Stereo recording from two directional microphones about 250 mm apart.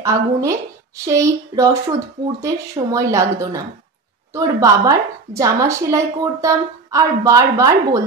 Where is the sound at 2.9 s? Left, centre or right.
Centre.